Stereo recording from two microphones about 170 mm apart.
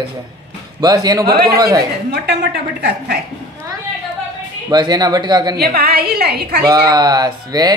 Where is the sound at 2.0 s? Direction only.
75° right (ahead or behind).